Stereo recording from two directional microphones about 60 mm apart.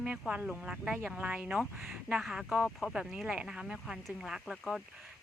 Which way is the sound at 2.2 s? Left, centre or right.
Centre.